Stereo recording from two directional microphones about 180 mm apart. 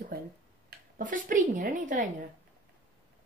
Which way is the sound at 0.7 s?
50° right (ahead or behind).